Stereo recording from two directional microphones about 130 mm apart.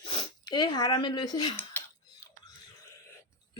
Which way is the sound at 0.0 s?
45° left (ahead or behind).